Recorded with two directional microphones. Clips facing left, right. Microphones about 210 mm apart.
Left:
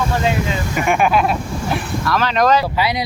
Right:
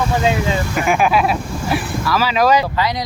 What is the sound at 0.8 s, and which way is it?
Speech, centre (ahead or behind).